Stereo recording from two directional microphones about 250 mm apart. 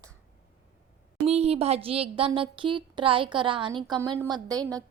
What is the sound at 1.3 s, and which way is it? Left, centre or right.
A woman's voice, right.